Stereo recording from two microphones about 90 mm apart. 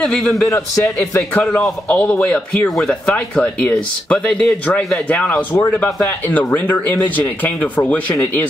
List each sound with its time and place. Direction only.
0.0 s a man's voice: 5° left (ahead or behind)
0.5 s a man's voice: 35° left (ahead or behind)
1.9 s speech: 15° left (ahead or behind)
5.9 s a man's voice: 30° left (ahead or behind)
6.3 s speech: 20° left (ahead or behind)